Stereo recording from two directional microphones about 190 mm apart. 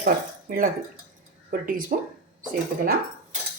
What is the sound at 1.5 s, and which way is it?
Speech, 50° right (ahead or behind).